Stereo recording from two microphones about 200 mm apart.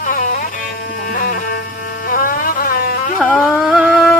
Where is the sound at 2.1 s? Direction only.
45° left (ahead or behind).